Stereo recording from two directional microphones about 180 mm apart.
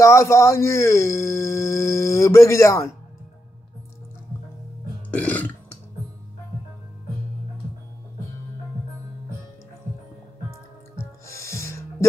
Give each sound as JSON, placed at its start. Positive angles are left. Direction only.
{"t": 0.0, "sound": "speech", "side_deg": 15}
{"t": 5.1, "sound": "burping", "side_deg": 10}
{"t": 11.0, "sound": "music", "side_deg": 15}